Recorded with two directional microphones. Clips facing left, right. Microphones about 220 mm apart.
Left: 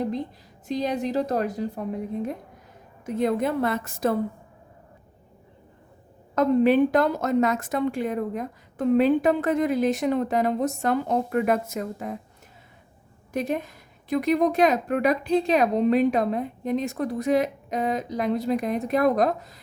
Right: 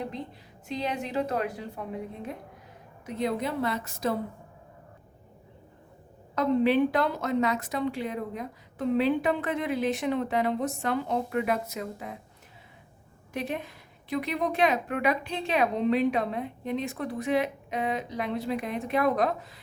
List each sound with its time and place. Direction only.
0.7 s a woman's voice: 40° left (ahead or behind)
3.2 s a woman's voice: 50° left (ahead or behind)
6.3 s a woman's voice: 45° left (ahead or behind)
13.3 s a woman's voice: 45° left (ahead or behind)